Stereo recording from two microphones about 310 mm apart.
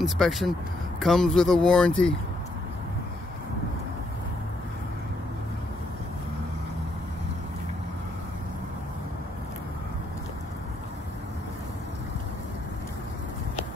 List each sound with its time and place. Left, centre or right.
0.0 s speech: centre